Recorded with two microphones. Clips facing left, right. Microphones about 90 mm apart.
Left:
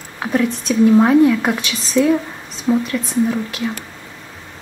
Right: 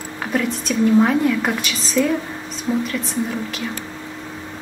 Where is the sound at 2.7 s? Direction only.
30° left (ahead or behind).